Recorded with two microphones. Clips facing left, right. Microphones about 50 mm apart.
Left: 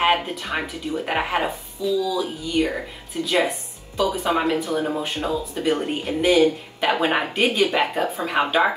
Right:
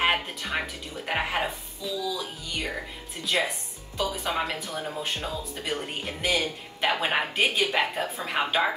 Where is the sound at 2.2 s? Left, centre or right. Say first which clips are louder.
Left 11 dB; left.